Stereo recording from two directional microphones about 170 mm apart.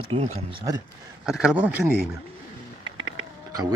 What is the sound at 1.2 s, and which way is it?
Speech, 5° right (ahead or behind).